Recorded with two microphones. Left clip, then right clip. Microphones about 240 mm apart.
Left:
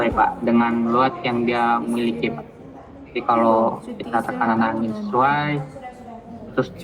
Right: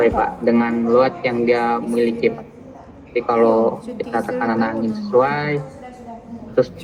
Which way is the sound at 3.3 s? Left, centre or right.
Left.